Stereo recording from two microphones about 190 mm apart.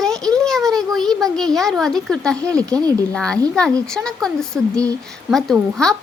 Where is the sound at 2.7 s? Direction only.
20° right (ahead or behind).